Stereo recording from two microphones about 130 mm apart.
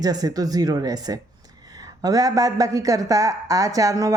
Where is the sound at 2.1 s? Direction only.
30° right (ahead or behind).